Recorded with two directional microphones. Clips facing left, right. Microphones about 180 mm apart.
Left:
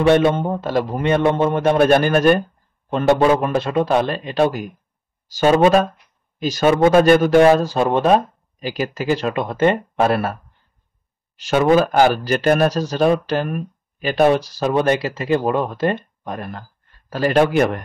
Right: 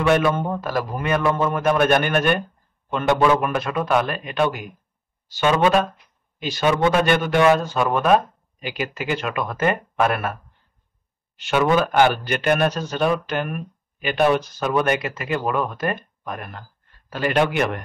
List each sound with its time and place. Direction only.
0.0 s a man's voice: 30° left (ahead or behind)